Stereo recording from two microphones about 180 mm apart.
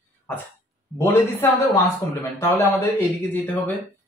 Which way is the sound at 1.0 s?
15° left (ahead or behind).